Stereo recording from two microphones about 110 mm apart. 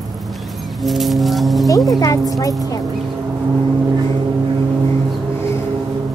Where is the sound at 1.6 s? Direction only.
35° left (ahead or behind).